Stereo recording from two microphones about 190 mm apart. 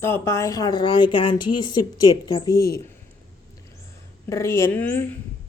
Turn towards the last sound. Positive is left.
turn(degrees=10)  # may be behind; listen again after turning